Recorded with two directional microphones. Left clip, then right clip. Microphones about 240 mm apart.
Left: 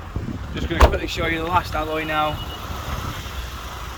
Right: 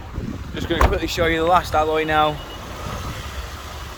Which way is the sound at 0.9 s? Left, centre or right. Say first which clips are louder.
Right 4 dB; centre.